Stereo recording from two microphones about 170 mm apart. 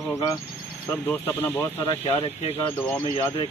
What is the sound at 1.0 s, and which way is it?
Speech, 10° left (ahead or behind).